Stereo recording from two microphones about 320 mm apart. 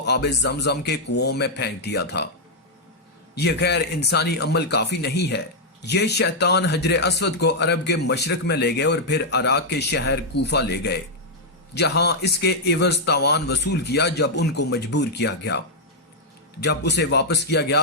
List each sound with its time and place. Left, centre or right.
0.0 s speech: left
3.3 s speech: left